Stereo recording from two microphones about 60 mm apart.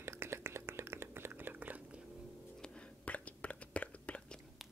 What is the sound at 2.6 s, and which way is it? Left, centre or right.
Chewing, centre.